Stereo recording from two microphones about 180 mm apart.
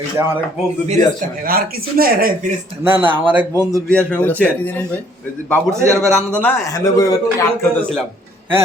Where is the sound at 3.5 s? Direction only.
20° right (ahead or behind).